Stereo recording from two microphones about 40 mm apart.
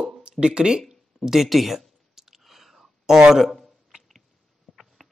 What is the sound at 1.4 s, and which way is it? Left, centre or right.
Clicking, centre.